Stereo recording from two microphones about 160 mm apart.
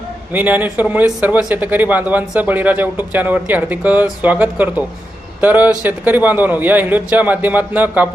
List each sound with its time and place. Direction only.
0.3 s a man's voice: 10° right (ahead or behind)